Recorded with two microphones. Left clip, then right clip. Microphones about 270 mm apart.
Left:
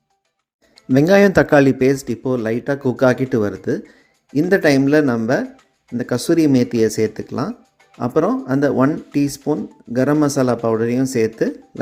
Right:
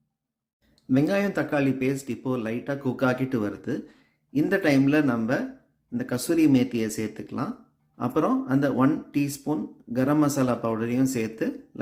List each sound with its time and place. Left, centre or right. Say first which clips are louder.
0.9 s speech: left 12 dB; left